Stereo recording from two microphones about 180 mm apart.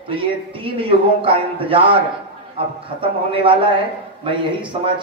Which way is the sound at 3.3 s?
30° right (ahead or behind).